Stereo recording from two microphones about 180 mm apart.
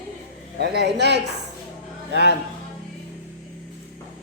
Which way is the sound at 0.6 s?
65° right (ahead or behind).